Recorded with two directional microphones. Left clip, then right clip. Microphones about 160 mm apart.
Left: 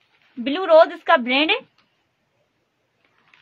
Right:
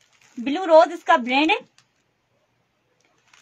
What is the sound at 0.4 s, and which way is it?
A woman's voice, 30° left (ahead or behind).